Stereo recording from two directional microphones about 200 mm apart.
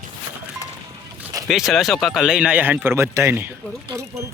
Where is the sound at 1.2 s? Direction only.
15° right (ahead or behind).